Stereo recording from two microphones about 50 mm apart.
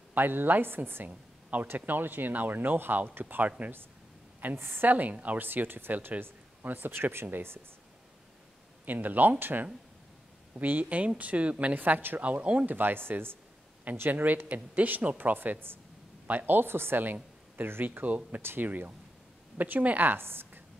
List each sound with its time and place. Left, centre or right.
0.1 s speech: right
4.6 s speech: right
4.9 s speech: right
8.8 s speech: right
12.2 s speech: right
12.6 s speech: right
14.2 s speech: right
18.0 s speech: right
18.4 s speech: right
18.7 s a woman's voice: right